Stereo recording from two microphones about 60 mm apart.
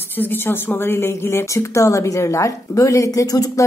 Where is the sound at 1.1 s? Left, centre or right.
Left.